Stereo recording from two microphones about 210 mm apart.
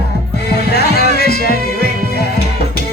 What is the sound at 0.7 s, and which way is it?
Speech, 50° left (ahead or behind).